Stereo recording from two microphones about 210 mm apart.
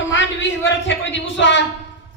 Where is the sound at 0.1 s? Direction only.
60° left (ahead or behind).